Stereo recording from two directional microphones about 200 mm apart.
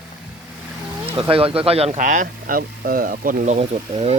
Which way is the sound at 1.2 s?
25° right (ahead or behind).